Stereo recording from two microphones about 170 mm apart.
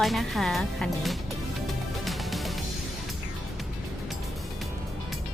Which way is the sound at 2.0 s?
Centre (ahead or behind).